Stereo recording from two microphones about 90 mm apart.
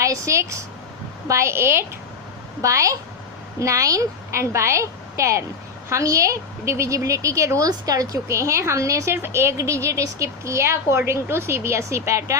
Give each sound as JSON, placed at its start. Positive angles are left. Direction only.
{"t": 0.0, "sound": "a woman's voice", "side_deg": -35}
{"t": 2.6, "sound": "a woman's voice", "side_deg": -35}